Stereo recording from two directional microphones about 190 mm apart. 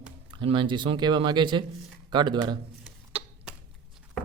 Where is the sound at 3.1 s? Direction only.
30° right (ahead or behind).